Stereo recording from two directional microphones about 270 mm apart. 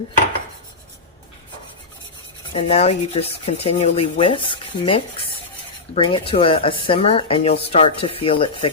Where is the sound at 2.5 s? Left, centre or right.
Left.